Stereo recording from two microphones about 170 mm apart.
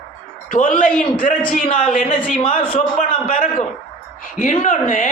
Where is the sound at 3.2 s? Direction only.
55° left (ahead or behind).